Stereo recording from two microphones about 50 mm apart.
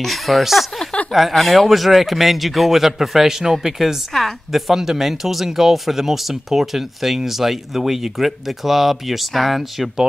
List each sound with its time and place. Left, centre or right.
0.0 s speech: centre
4.1 s a woman's voice: centre
4.5 s speech: centre